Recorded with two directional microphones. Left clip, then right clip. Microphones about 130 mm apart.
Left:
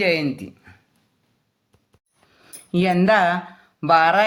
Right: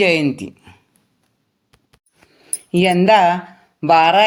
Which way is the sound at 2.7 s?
20° right (ahead or behind).